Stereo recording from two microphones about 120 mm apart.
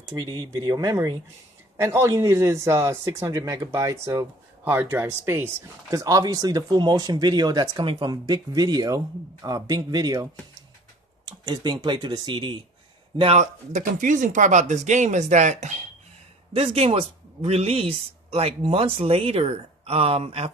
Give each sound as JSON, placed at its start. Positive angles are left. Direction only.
{"t": 0.1, "sound": "a man's voice", "side_deg": -30}
{"t": 11.2, "sound": "speech", "side_deg": -35}
{"t": 13.4, "sound": "speech", "side_deg": -90}
{"t": 16.5, "sound": "speech", "side_deg": -55}